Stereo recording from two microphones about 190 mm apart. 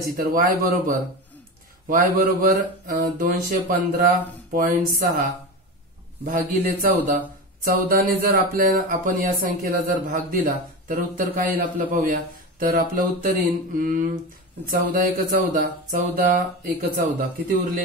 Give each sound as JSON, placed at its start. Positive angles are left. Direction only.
{"t": 0.2, "sound": "speech", "side_deg": -50}
{"t": 6.2, "sound": "speech", "side_deg": -45}